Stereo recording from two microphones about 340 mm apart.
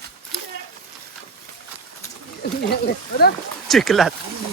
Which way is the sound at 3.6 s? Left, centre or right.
Centre.